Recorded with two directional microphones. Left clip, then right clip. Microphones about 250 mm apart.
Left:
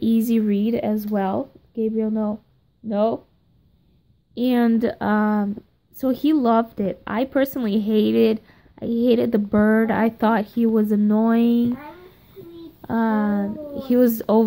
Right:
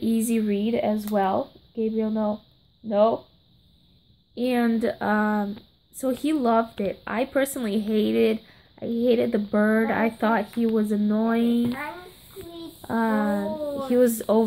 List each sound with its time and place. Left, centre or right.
0.0 s a woman's voice: left
4.4 s a woman's voice: left
12.8 s speech: left